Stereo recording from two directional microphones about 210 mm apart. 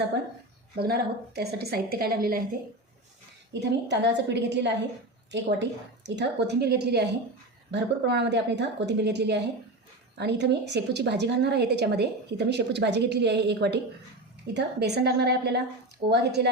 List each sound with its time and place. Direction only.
0.8 s a woman's voice: 50° right (ahead or behind)
3.5 s a woman's voice: 55° right (ahead or behind)